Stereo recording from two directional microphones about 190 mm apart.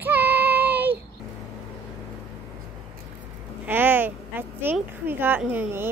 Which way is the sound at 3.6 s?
10° right (ahead or behind).